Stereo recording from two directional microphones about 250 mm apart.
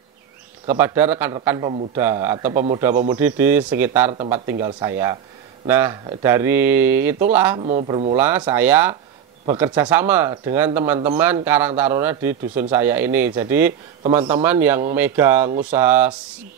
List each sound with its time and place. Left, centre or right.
0.7 s speech: centre
7.6 s speech: right
8.2 s speech: centre